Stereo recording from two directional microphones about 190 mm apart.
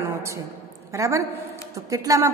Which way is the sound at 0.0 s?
15° right (ahead or behind).